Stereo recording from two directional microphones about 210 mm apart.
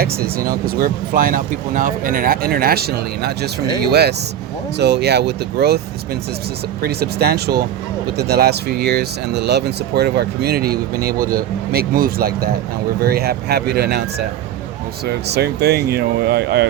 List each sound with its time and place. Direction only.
0.0 s speech: 45° right (ahead or behind)
6.8 s speech: 50° right (ahead or behind)